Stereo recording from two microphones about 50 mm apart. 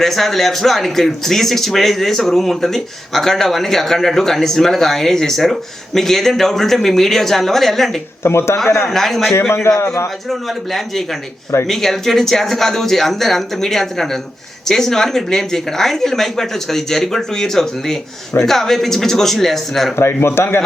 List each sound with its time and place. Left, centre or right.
0.0 s speech: centre
8.2 s speech: left
8.8 s speech: centre
9.6 s a man's voice: left
10.7 s speech: centre
20.2 s speech: left